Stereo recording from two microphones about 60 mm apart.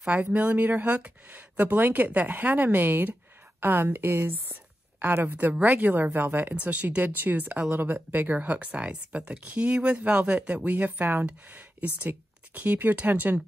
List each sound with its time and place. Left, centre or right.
0.0 s a woman's voice: centre; by 6.5 s right
6.5 s a woman's voice: right